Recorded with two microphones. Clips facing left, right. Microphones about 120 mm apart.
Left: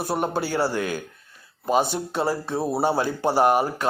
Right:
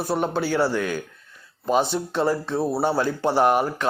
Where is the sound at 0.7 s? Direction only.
45° left (ahead or behind).